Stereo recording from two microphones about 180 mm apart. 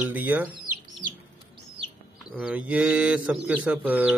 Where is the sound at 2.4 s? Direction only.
10° right (ahead or behind).